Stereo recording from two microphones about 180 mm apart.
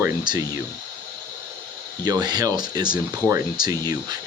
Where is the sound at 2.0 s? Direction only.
20° right (ahead or behind).